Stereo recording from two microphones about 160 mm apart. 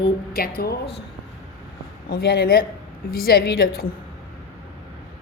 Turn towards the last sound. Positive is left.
turn(degrees=80)